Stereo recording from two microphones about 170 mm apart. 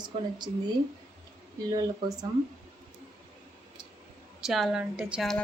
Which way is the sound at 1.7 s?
20° right (ahead or behind).